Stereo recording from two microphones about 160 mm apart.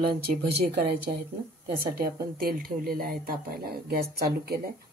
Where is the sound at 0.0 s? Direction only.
85° right.